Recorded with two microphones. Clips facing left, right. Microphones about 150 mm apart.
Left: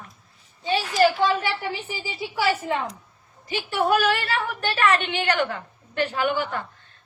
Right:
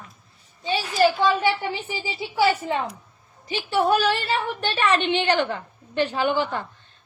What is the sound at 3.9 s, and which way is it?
A woman's voice, 25° right (ahead or behind).